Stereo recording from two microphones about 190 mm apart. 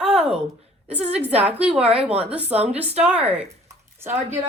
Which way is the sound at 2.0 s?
5° right (ahead or behind).